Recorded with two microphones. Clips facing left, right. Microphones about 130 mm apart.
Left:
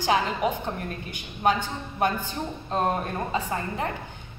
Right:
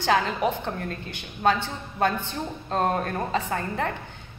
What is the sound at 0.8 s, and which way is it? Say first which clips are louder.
Speech: right 1 dB; 15° left (ahead or behind).